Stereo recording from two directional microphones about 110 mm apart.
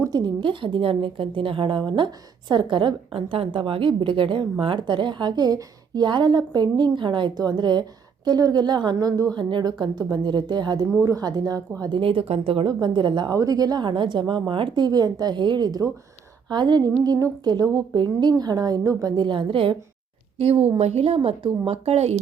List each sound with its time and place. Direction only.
0.0 s a woman's voice: 40° right (ahead or behind)
11.8 s a woman's voice: 50° right (ahead or behind)
20.4 s speech: 65° right (ahead or behind)